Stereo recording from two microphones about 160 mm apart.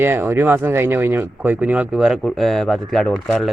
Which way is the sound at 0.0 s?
15° right (ahead or behind).